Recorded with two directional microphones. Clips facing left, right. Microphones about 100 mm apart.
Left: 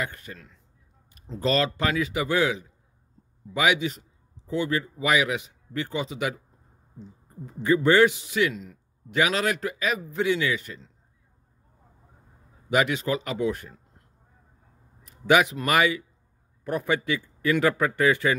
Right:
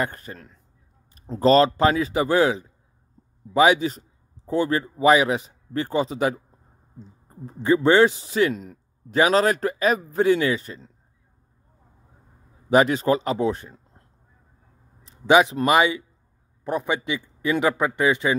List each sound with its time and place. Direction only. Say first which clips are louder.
0.0 s a man's voice: right 5 dB; 40° right (ahead or behind)
12.6 s a man's voice: right 6 dB; 35° right (ahead or behind)
15.0 s a sound: right 4 dB; 25° right (ahead or behind)
15.6 s a man's voice: right 4 dB; 25° right (ahead or behind)